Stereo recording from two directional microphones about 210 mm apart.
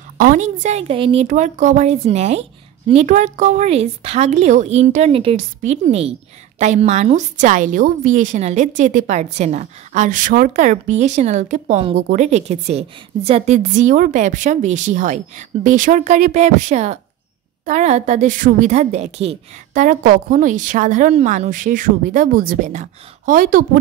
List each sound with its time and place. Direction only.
0.2 s a woman's voice: 40° right (ahead or behind)